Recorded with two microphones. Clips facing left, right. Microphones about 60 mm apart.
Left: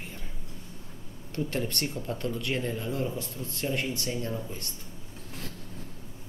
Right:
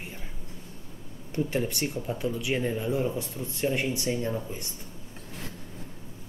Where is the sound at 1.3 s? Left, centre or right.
Centre.